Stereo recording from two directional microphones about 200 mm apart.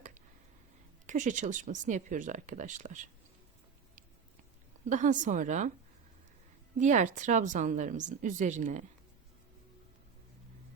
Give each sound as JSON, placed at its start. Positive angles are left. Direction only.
{"t": 1.0, "sound": "a woman's voice", "side_deg": -40}
{"t": 4.9, "sound": "a woman's voice", "side_deg": -40}
{"t": 6.7, "sound": "a woman's voice", "side_deg": -40}